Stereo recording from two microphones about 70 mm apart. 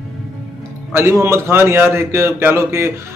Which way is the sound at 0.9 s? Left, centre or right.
Right.